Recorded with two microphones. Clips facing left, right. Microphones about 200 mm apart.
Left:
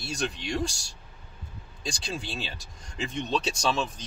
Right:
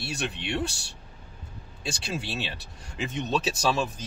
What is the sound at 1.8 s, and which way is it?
Speech, 5° right (ahead or behind).